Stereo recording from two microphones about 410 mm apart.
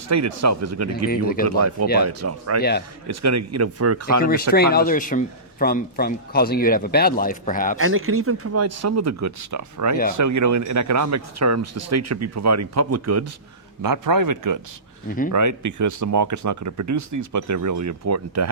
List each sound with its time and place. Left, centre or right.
0.1 s speech: right
1.1 s speech: left
2.0 s speech: right
2.6 s speech: left
3.1 s speech: right
4.2 s speech: left
7.8 s speech: right
13.8 s speech: right